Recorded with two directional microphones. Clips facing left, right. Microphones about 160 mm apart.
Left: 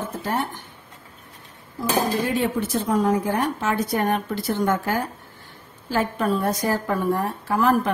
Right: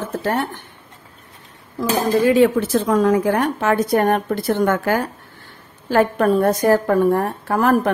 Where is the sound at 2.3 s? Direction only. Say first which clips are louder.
Right 9 dB; 90° right.